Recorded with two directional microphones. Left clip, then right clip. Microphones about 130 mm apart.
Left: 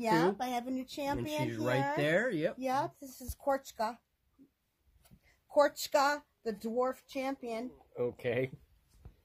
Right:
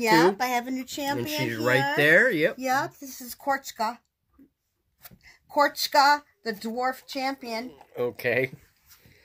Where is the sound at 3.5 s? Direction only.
90° left.